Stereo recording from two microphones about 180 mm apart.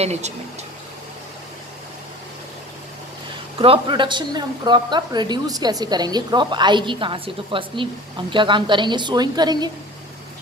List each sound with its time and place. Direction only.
0.0 s speech: 40° right (ahead or behind)
3.6 s a woman's voice: 30° right (ahead or behind)